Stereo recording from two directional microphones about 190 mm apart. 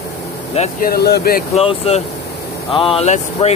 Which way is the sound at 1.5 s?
30° left (ahead or behind).